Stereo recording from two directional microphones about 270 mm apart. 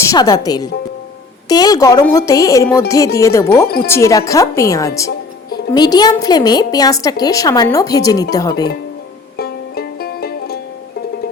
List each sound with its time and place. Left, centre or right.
0.0 s a woman's voice: centre
9.4 s music: left